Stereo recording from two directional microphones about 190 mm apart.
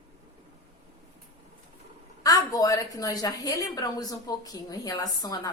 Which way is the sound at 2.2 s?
20° left (ahead or behind).